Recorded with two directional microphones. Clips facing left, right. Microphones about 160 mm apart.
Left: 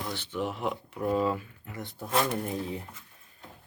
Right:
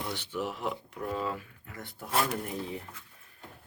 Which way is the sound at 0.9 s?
20° left (ahead or behind).